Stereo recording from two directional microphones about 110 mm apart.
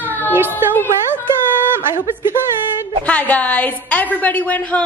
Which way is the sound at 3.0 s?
15° left (ahead or behind).